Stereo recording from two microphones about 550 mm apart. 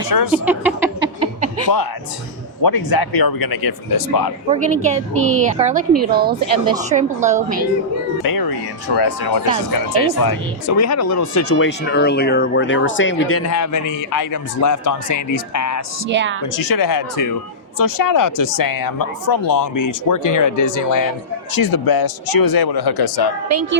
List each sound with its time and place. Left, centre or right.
0.1 s speech: left
0.4 s a sound: centre
2.6 s speech: left
4.4 s a woman's voice: centre
8.2 s speech: left
16.0 s speech: centre
16.4 s speech: left
23.5 s speech: right